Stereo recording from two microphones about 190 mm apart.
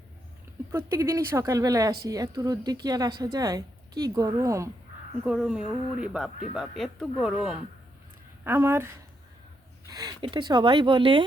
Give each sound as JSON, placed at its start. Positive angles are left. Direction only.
{"t": 0.7, "sound": "a woman's voice", "side_deg": -15}
{"t": 5.2, "sound": "a woman's voice", "side_deg": -5}
{"t": 9.9, "sound": "speech", "side_deg": -20}